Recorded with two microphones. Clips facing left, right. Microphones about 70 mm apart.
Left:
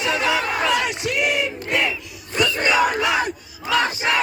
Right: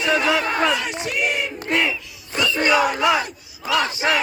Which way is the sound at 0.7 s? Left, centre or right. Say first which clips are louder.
Left 3 dB; left.